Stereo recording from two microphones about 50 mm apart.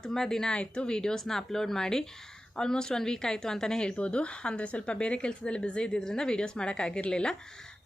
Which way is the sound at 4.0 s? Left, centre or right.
Left.